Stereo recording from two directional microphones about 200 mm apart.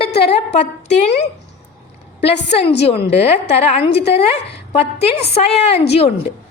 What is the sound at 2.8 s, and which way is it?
A woman's voice, 30° left (ahead or behind).